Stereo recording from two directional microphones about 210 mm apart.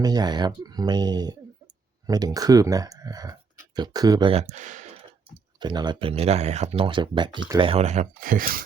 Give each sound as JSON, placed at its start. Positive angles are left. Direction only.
{"t": 0.0, "sound": "speech", "side_deg": -20}
{"t": 5.5, "sound": "speech", "side_deg": -20}